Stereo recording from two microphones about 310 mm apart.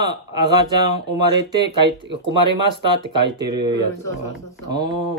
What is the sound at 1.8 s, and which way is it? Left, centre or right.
Speech, right.